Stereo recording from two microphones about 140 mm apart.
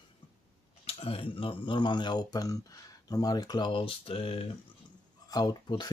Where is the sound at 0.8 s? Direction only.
45° left (ahead or behind).